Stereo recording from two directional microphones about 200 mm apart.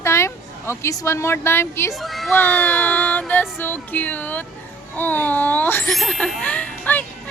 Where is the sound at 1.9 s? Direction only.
Centre (ahead or behind).